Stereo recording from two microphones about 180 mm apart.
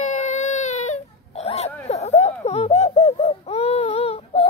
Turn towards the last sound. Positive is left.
turn(degrees=35)  # may be behind; listen again after turning